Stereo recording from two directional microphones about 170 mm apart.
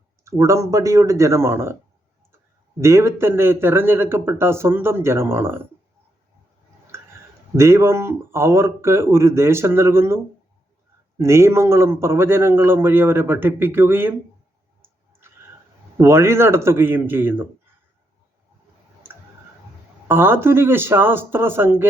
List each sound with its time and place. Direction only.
0.3 s a man's voice: 20° right (ahead or behind)
2.8 s a man's voice: 15° right (ahead or behind)
6.9 s a sound: 15° right (ahead or behind)
7.5 s a man's voice: 15° right (ahead or behind)
11.2 s a man's voice: 15° right (ahead or behind)
16.0 s a man's voice: 15° right (ahead or behind)
20.1 s a man's voice: 10° right (ahead or behind)